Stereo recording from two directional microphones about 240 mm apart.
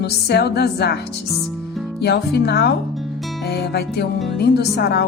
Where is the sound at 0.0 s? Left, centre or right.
Left.